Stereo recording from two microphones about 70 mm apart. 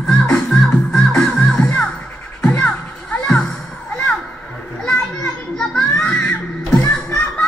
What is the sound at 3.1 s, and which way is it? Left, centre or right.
Music, centre.